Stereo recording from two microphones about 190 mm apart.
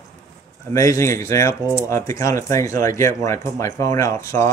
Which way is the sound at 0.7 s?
15° left (ahead or behind).